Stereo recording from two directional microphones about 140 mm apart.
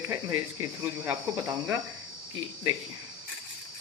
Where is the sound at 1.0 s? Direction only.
20° right (ahead or behind).